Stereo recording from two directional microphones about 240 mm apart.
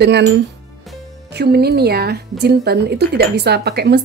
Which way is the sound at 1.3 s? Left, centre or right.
Right.